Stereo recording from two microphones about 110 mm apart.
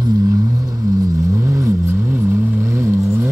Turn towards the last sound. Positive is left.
turn(degrees=-25)  # may be behind; listen again after turning